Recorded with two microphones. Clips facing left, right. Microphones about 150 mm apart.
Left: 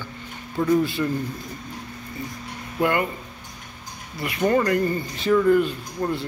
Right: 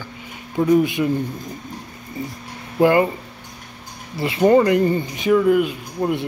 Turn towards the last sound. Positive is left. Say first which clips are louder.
# right 3 dB
turn(degrees=-10)  # may be behind; listen again after turning